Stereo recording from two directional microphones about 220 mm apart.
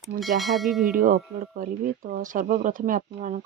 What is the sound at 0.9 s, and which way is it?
Speech, 40° right (ahead or behind).